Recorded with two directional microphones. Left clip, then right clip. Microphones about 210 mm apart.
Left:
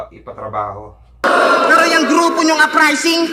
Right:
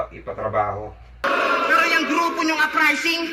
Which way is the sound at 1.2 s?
35° left (ahead or behind).